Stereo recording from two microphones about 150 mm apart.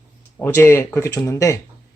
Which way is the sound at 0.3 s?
15° left (ahead or behind).